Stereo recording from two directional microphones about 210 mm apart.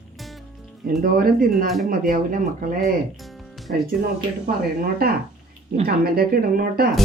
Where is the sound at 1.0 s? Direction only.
45° right (ahead or behind).